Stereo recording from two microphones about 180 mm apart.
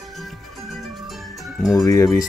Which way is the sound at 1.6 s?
Centre (ahead or behind).